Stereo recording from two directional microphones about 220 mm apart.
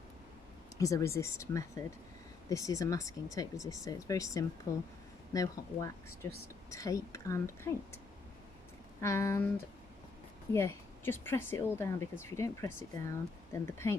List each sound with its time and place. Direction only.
0.8 s speech: 15° left (ahead or behind)
9.0 s speech: 10° left (ahead or behind)
10.5 s speech: 10° left (ahead or behind)